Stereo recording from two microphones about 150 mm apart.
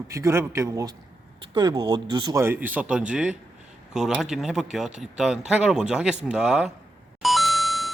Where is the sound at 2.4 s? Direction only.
15° right (ahead or behind).